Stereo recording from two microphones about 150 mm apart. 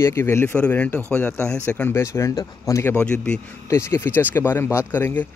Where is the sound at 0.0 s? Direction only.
15° left (ahead or behind).